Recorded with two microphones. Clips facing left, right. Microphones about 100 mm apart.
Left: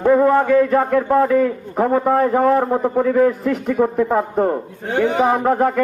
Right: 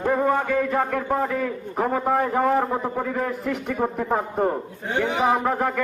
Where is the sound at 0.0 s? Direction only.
50° left (ahead or behind).